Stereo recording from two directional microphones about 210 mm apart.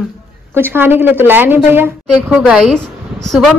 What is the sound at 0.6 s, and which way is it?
A woman's voice, 10° right (ahead or behind).